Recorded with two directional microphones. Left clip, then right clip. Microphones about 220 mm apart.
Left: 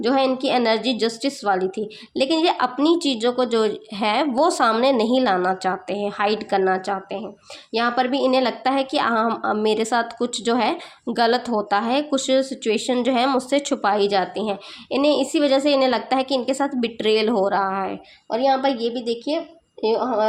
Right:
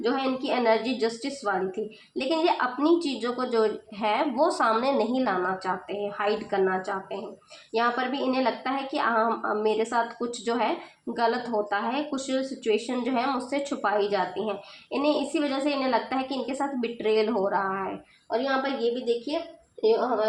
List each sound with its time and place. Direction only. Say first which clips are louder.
0.0 s a woman's voice: left 8 dB; 50° left (ahead or behind)